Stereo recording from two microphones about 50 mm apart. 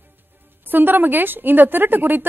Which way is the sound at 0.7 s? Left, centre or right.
Right.